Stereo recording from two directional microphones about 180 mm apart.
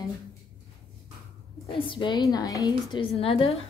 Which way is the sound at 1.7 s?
30° left (ahead or behind).